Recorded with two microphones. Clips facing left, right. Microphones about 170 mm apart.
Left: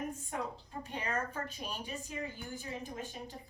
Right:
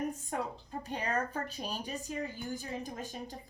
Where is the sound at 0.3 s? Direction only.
40° right (ahead or behind).